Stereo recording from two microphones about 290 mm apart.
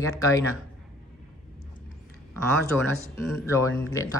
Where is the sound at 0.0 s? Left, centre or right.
Centre.